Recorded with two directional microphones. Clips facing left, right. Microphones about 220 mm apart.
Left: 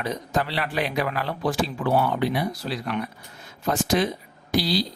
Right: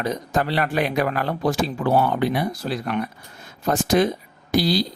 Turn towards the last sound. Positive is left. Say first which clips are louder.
# right 3 dB
turn(degrees=-45)  # may be behind; listen again after turning